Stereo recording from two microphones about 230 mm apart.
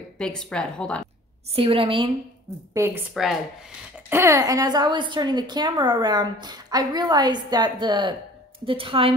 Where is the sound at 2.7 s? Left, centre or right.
Centre.